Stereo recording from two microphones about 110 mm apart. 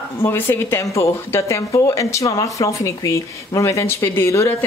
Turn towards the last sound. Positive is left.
turn(degrees=25)  # may be behind; listen again after turning